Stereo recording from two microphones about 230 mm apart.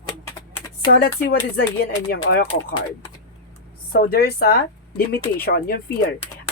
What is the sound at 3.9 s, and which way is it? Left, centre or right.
Speech, left.